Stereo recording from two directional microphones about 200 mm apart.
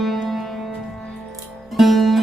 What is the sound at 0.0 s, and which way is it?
Music, centre (ahead or behind).